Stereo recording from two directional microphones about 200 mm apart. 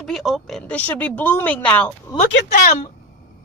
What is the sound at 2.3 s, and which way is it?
Speech, 60° left (ahead or behind).